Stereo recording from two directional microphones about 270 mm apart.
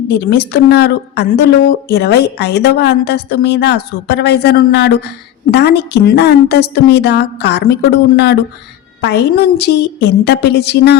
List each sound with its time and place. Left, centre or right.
0.1 s a woman's voice: left